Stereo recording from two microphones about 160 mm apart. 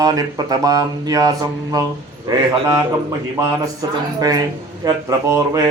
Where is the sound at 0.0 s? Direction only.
25° right (ahead or behind).